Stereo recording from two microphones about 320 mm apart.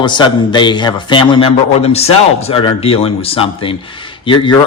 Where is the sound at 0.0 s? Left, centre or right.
Centre.